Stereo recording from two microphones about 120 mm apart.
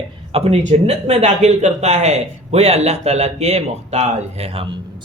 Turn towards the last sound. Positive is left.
turn(degrees=-55)  # may be behind; listen again after turning